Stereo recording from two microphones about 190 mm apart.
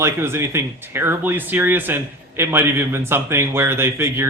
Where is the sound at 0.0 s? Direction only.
15° right (ahead or behind).